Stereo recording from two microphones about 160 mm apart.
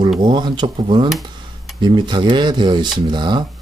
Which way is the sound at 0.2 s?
25° right (ahead or behind).